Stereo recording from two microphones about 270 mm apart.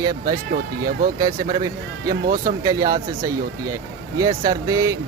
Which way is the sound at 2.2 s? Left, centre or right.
Right.